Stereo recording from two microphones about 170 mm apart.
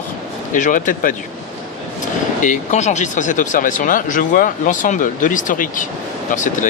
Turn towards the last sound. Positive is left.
turn(degrees=50)  # may be behind; listen again after turning